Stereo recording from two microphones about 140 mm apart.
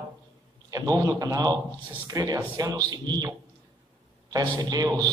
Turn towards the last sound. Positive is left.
turn(degrees=-25)  # may be behind; listen again after turning